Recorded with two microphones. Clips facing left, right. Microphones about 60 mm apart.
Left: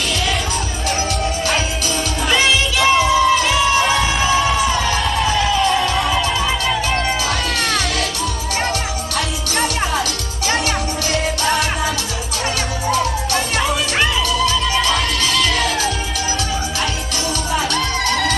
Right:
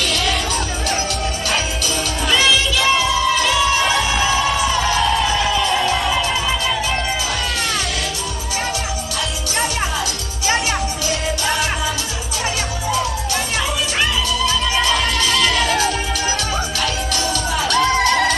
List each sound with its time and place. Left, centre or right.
2.2 s music: left
15.6 s music: right
17.6 s music: right